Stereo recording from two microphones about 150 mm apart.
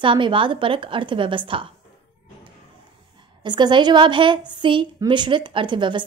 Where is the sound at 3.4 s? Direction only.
30° right (ahead or behind).